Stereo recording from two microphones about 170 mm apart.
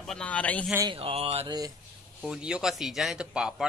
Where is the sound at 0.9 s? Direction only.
30° right (ahead or behind).